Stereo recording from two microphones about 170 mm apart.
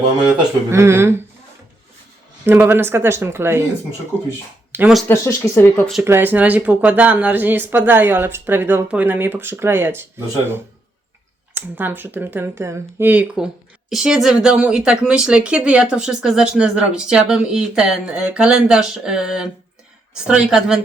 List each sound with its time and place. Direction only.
0.7 s speech: 15° right (ahead or behind)
2.5 s speech: 10° right (ahead or behind)
4.7 s speech: 5° right (ahead or behind)
5.0 s speech: 15° left (ahead or behind)
5.9 s speech: 10° right (ahead or behind)